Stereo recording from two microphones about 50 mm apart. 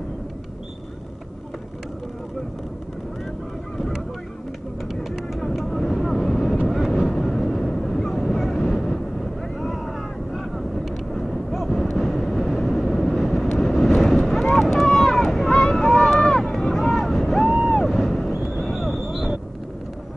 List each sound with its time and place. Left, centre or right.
3.7 s goose: centre
5.1 s vehicle: centre
7.0 s a sound: centre
9.6 s vehicle: centre
17.7 s boat: centre
18.4 s a sound: centre